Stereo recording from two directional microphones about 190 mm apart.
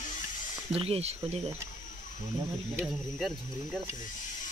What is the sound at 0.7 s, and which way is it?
Speech, 30° right (ahead or behind).